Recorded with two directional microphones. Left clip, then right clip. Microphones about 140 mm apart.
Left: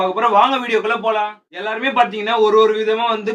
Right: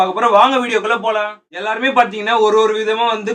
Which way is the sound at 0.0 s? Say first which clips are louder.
Right 3 dB; 20° right (ahead or behind).